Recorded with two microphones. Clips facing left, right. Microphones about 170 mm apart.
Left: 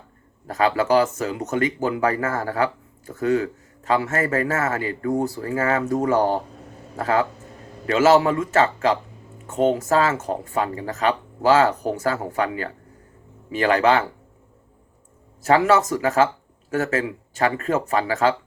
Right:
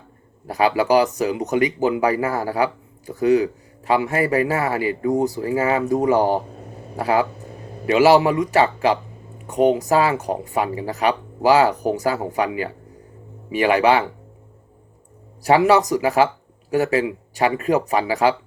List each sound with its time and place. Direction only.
0.4 s speech: 15° right (ahead or behind)
15.4 s speech: 15° right (ahead or behind)